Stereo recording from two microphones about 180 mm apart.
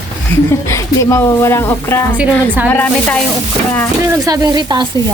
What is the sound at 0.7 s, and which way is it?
Speech, 15° left (ahead or behind).